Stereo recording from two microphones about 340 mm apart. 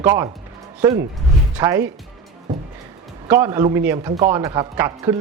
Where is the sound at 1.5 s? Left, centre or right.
Centre.